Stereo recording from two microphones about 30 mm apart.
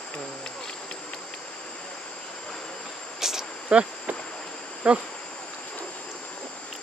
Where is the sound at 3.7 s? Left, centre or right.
Right.